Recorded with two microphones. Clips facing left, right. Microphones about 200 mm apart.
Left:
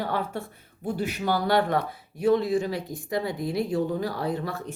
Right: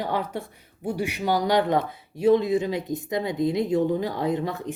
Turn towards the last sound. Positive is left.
turn(degrees=-20)  # may be behind; listen again after turning